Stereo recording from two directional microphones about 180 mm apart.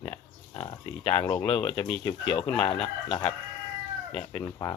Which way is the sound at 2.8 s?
30° left (ahead or behind).